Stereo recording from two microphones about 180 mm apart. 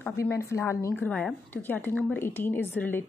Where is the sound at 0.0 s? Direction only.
15° left (ahead or behind).